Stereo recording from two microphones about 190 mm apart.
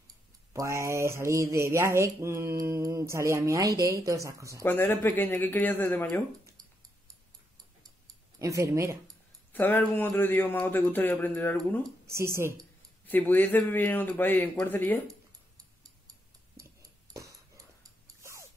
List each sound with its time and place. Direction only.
0.5 s mantra: 15° right (ahead or behind)
4.6 s speech: 10° left (ahead or behind)
8.4 s mantra: 15° right (ahead or behind)
9.5 s speech: 10° left (ahead or behind)
12.1 s mantra: 15° right (ahead or behind)
13.0 s speech: 10° left (ahead or behind)
15.5 s music: 20° right (ahead or behind)
18.0 s a sound: 15° right (ahead or behind)